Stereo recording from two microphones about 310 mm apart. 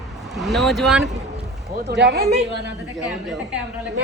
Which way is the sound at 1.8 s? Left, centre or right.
Right.